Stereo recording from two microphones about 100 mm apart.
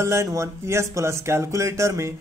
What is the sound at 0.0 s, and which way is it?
Speech, 30° right (ahead or behind).